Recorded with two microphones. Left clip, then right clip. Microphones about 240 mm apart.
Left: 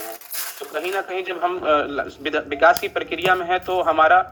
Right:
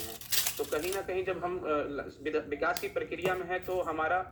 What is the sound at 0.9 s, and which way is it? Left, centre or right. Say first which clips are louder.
A man's voice: left 8 dB; left.